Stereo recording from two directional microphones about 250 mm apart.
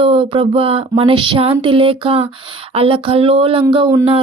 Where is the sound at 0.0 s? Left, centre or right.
Right.